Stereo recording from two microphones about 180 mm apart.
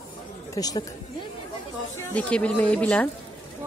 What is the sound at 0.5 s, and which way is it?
Speech, 20° left (ahead or behind).